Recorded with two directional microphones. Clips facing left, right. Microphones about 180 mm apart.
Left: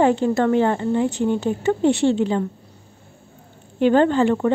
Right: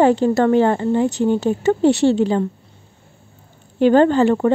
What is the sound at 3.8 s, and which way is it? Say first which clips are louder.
Speech: right 3 dB; 40° right (ahead or behind).